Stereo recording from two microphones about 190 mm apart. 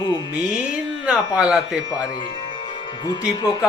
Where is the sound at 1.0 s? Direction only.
5° right (ahead or behind).